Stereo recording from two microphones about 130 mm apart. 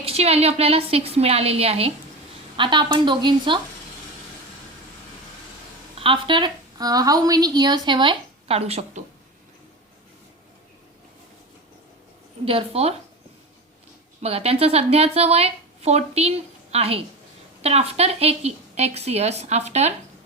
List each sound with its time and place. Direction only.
0.0 s a woman's voice: 50° right (ahead or behind)
2.6 s a woman's voice: 35° right (ahead or behind)
6.0 s a woman's voice: 40° right (ahead or behind)
12.5 s a woman's voice: 50° right (ahead or behind)
14.2 s a woman's voice: 50° right (ahead or behind)